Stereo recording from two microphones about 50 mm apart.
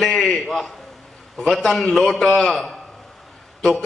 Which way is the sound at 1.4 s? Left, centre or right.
Centre.